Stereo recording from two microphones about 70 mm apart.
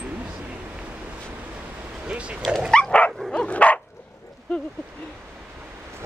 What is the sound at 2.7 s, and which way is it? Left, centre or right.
Dog, centre.